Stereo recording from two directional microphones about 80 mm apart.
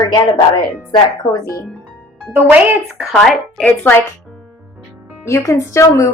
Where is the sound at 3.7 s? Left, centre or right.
Left.